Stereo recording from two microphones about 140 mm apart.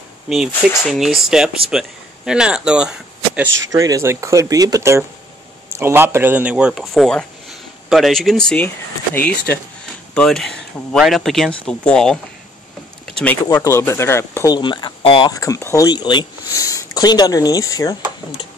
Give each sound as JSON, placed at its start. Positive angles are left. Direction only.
{"t": 0.3, "sound": "speech", "side_deg": 0}
{"t": 3.5, "sound": "speech", "side_deg": -25}
{"t": 6.8, "sound": "speech", "side_deg": 5}
{"t": 13.6, "sound": "speech", "side_deg": 20}
{"t": 14.5, "sound": "speech", "side_deg": 35}
{"t": 15.3, "sound": "speech", "side_deg": 25}